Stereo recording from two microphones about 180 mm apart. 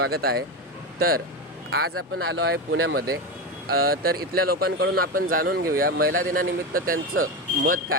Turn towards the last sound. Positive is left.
turn(degrees=-50)  # may be behind; listen again after turning